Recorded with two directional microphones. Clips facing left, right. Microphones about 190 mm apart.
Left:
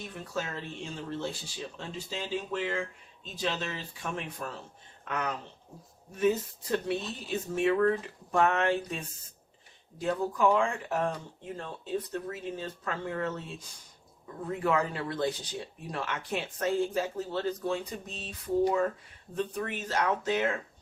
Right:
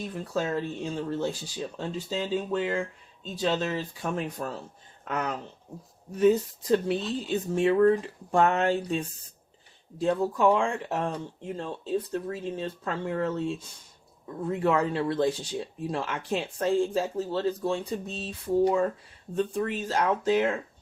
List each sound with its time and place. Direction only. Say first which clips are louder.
0.3 s speech: right 7 dB; 35° right (ahead or behind)
6.7 s speech: right 6 dB; 30° right (ahead or behind)